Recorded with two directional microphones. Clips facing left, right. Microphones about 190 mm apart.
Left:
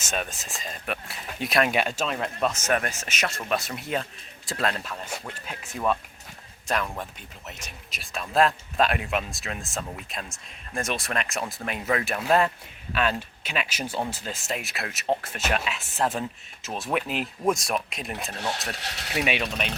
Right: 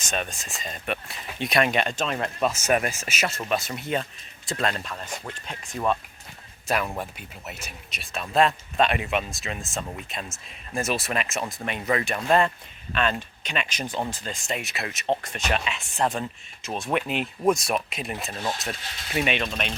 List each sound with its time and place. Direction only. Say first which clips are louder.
0.0 s speech: right 1 dB; 5° left (ahead or behind)
18.3 s speech: right 1 dB; 75° left (ahead or behind)
19.1 s speech: right 1 dB; 10° left (ahead or behind)